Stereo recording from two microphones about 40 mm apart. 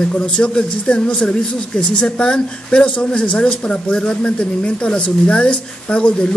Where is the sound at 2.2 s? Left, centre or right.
Left.